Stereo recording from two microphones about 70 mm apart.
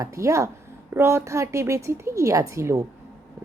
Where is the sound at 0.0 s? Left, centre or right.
Right.